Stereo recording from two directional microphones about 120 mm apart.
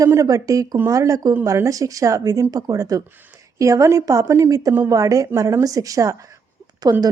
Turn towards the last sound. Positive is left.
turn(degrees=-35)  # may be behind; listen again after turning